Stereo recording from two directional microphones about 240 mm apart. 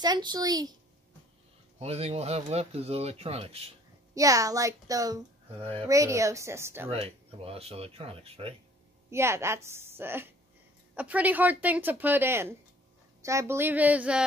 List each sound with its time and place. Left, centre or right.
0.0 s a woman's voice: centre
1.8 s speech: right
4.1 s a woman's voice: centre
6.9 s speech: right
9.1 s a woman's voice: centre